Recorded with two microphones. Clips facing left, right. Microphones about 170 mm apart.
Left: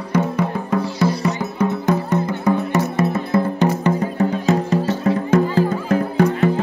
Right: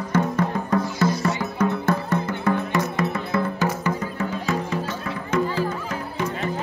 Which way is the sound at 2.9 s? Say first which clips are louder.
Left 5 dB; 25° left (ahead or behind).